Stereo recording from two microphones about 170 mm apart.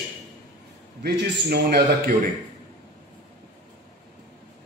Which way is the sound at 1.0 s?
75° right (ahead or behind).